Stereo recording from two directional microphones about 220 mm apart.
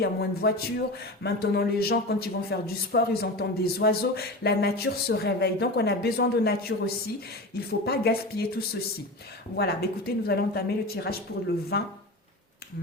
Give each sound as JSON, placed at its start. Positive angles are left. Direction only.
{"t": 0.0, "sound": "speech", "side_deg": 45}